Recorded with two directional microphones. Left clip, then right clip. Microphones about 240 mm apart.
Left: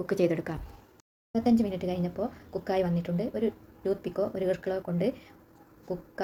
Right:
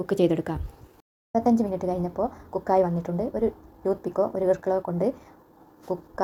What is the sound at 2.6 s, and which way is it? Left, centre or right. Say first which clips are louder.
A woman's voice: right 7 dB; right.